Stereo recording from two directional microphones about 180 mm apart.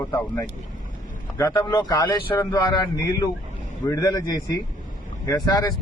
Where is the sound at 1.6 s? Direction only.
25° left (ahead or behind).